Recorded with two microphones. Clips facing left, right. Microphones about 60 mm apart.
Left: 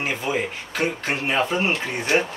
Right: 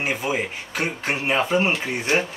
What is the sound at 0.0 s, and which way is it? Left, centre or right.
Speech, centre.